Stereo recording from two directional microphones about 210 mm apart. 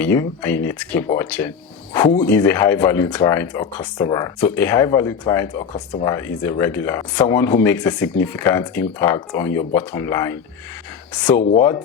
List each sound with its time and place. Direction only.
0.0 s speech: 10° left (ahead or behind)
5.5 s speech: 35° left (ahead or behind)
6.1 s speech: 15° left (ahead or behind)